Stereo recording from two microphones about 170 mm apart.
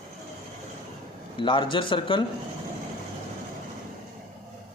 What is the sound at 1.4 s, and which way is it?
Speech, 30° left (ahead or behind).